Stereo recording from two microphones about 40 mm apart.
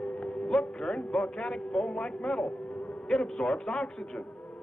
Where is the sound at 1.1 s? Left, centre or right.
Centre.